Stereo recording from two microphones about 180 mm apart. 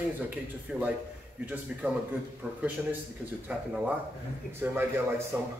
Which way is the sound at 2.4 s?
10° right (ahead or behind).